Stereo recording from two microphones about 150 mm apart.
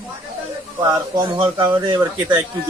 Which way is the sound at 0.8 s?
25° right (ahead or behind).